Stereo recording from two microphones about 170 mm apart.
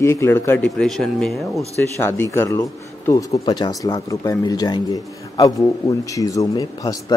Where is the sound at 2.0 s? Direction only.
15° left (ahead or behind).